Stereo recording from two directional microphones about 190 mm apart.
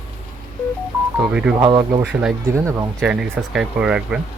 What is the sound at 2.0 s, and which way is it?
Speech, 5° right (ahead or behind).